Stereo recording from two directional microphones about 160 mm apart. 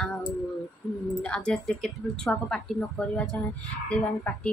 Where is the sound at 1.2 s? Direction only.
5° left (ahead or behind).